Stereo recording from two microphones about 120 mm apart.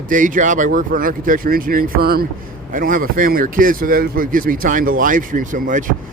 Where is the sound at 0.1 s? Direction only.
90° right.